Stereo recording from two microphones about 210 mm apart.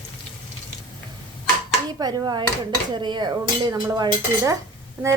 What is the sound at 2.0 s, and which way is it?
Speech, 20° right (ahead or behind).